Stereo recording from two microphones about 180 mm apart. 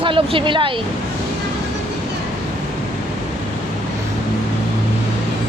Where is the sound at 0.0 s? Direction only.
30° right (ahead or behind).